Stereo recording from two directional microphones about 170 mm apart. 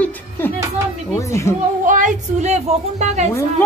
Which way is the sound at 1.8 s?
50° right (ahead or behind).